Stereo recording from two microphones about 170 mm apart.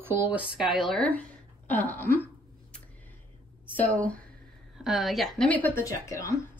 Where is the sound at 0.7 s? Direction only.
Centre (ahead or behind).